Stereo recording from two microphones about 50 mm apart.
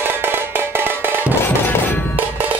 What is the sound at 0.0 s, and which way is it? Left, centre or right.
Music, right.